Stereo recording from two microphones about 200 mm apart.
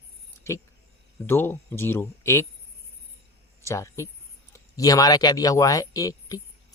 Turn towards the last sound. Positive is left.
turn(degrees=15)  # may be behind; listen again after turning